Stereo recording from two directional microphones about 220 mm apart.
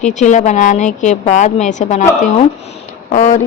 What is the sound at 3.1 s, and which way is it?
Speech, 30° left (ahead or behind).